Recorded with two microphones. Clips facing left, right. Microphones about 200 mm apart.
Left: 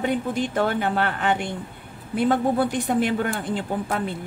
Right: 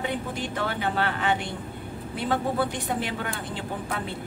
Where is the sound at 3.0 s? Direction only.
45° left (ahead or behind).